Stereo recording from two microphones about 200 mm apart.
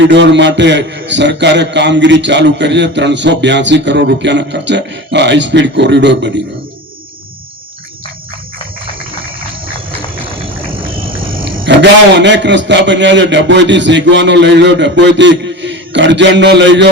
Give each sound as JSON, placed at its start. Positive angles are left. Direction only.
{"t": 0.0, "sound": "a man's voice", "side_deg": -60}
{"t": 11.6, "sound": "a man's voice", "side_deg": -60}